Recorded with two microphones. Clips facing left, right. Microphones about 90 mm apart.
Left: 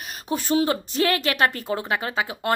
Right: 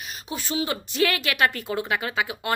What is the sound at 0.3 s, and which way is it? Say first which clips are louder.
A woman's voice: left 6 dB; 45° left (ahead or behind).